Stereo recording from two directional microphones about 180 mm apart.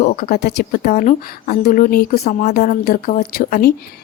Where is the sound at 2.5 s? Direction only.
55° left (ahead or behind).